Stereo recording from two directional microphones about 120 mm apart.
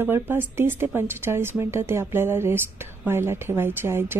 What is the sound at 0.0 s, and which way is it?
Speech, 15° right (ahead or behind).